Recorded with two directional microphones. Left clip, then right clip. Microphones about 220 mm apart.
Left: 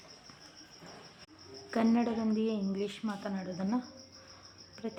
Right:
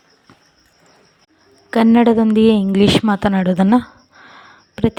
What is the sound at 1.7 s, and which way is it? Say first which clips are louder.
Speech: right 18 dB; 45° right (ahead or behind).